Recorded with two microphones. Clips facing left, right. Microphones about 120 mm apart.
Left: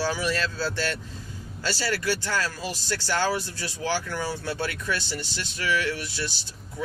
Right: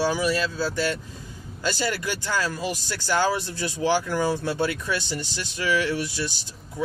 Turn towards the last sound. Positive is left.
turn(degrees=-15)  # may be behind; listen again after turning